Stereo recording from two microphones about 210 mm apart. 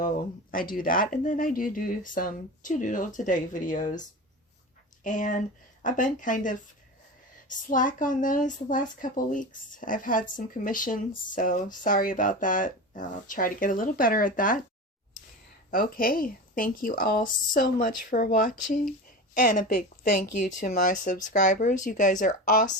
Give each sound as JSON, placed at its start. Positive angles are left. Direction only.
{"t": 0.0, "sound": "a woman's voice", "side_deg": 40}
{"t": 5.0, "sound": "a woman's voice", "side_deg": 35}
{"t": 15.7, "sound": "a woman's voice", "side_deg": 40}